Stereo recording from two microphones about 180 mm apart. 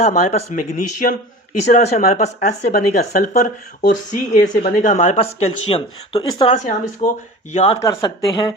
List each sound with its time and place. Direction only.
0.1 s speech: 40° left (ahead or behind)
7.8 s speech: 20° left (ahead or behind)